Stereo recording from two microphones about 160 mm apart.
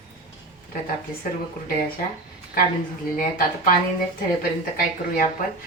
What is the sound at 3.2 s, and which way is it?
Speech, 55° left (ahead or behind).